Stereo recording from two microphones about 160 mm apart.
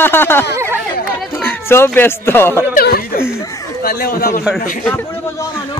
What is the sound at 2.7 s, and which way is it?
Speech, 65° left (ahead or behind).